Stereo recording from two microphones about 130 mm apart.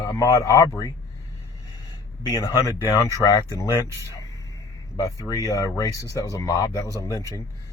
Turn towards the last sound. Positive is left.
turn(degrees=25)  # may be behind; listen again after turning